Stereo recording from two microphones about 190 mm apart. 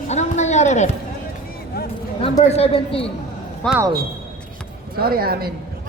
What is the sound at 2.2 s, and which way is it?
Speech, 35° left (ahead or behind).